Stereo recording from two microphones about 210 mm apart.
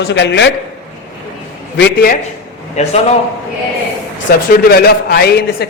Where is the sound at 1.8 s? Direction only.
50° left (ahead or behind).